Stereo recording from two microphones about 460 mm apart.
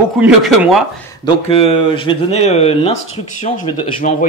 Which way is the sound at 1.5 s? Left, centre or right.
Centre.